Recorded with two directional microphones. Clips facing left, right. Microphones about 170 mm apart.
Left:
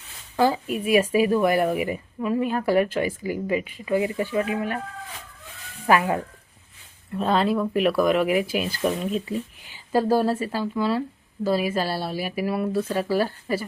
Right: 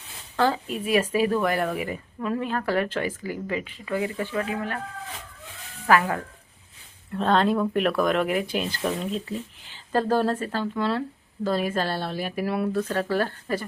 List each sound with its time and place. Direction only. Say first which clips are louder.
0.3 s speech: left 2 dB; 10° left (ahead or behind)
5.8 s speech: left 1 dB; 15° left (ahead or behind)
7.1 s speech: even; 5° left (ahead or behind)